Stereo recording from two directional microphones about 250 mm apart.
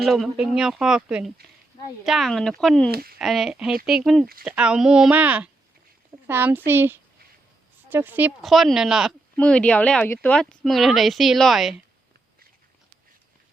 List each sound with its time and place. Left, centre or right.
0.0 s speech: centre
2.9 s speech: right
3.2 s speech: centre